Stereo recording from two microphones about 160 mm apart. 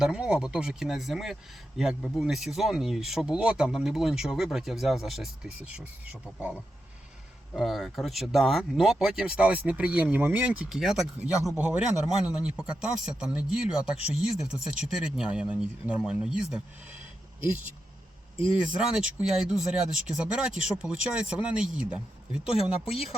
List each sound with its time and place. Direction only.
0.0 s speech: 5° right (ahead or behind)
13.9 s speech: 40° left (ahead or behind)
14.2 s speech: 5° right (ahead or behind)
18.8 s speech: 5° right (ahead or behind)
22.5 s speech: 35° left (ahead or behind)